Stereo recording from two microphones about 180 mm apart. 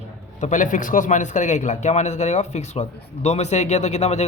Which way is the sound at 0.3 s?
45° left (ahead or behind).